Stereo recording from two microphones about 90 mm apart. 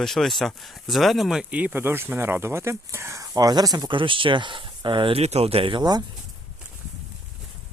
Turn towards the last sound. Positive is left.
turn(degrees=-50)  # may be behind; listen again after turning